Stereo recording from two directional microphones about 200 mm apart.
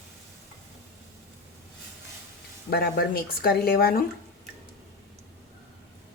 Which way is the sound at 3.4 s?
50° left (ahead or behind).